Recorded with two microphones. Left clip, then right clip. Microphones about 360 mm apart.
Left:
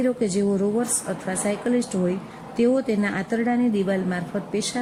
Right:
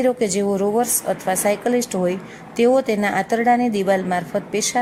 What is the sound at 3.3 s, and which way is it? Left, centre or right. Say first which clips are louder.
Speech: right 6 dB; right.